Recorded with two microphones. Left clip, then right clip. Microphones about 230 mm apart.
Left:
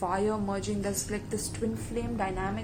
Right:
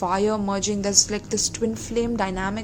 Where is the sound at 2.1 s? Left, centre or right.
Right.